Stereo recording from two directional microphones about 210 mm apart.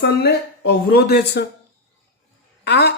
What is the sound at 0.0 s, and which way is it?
Speech, 50° left (ahead or behind).